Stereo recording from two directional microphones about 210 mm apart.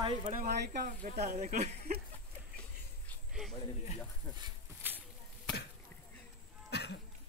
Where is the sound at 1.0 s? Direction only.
35° right (ahead or behind).